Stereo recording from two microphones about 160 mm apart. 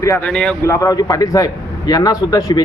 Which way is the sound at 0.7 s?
20° left (ahead or behind).